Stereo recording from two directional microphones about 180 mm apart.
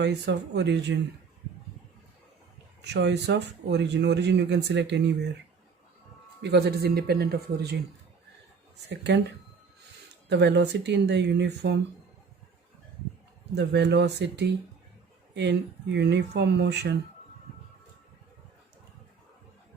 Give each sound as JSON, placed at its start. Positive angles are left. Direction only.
{"t": 0.0, "sound": "speech", "side_deg": -70}
{"t": 2.8, "sound": "speech", "side_deg": -70}
{"t": 6.4, "sound": "speech", "side_deg": -65}
{"t": 8.9, "sound": "speech", "side_deg": -75}
{"t": 10.2, "sound": "speech", "side_deg": -70}
{"t": 13.6, "sound": "speech", "side_deg": -70}